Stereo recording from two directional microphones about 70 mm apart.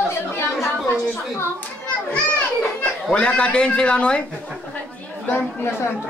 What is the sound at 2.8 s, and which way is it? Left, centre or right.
A man's voice, centre.